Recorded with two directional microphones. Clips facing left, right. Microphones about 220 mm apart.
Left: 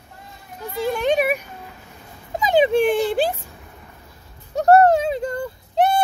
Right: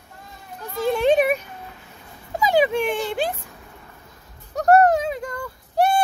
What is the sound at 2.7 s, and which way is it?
Speech, 35° left (ahead or behind).